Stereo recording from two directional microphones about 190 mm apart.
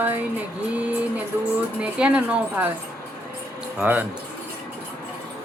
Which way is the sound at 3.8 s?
10° right (ahead or behind).